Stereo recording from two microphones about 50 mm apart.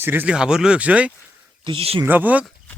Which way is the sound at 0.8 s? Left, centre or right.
Right.